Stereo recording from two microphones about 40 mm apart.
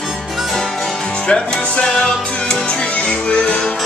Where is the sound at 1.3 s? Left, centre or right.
Left.